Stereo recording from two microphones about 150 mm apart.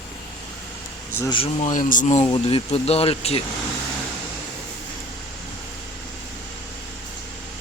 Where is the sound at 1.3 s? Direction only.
35° left (ahead or behind).